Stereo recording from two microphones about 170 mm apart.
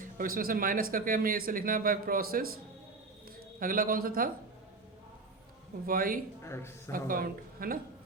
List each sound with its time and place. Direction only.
0.0 s speech: 55° right (ahead or behind)
3.6 s speech: 55° right (ahead or behind)
5.8 s speech: 55° right (ahead or behind)
6.4 s speech: 15° left (ahead or behind)
6.9 s speech: 55° right (ahead or behind)